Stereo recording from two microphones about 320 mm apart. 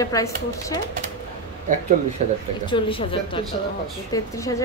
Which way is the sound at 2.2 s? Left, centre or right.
Right.